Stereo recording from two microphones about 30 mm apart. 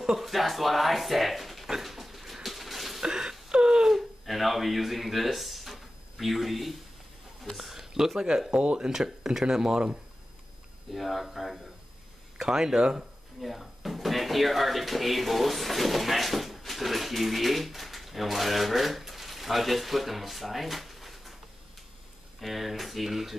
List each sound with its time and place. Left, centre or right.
0.2 s speech: centre
1.8 s dog: centre
2.4 s a sound: centre
3.0 s whimper: right
3.9 s a sound: centre
7.5 s speech: centre
10.9 s speech: centre
12.4 s speech: right
13.4 s speech: centre
22.4 s speech: centre